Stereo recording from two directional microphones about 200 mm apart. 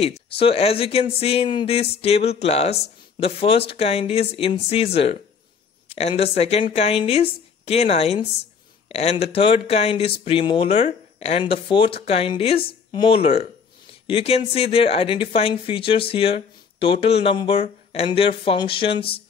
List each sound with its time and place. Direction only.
0.0 s speech: 30° left (ahead or behind)